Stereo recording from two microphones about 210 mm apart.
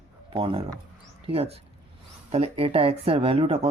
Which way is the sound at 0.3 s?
25° right (ahead or behind).